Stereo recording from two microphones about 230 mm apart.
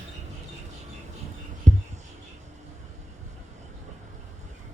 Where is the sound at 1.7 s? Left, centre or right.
Right.